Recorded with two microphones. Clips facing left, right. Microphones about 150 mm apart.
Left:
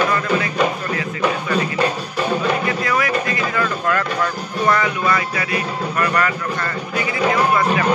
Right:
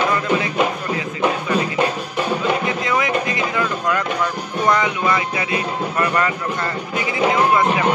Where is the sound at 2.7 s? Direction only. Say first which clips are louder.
Even; 20° right (ahead or behind).